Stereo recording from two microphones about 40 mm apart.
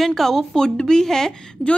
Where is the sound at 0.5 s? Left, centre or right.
Centre.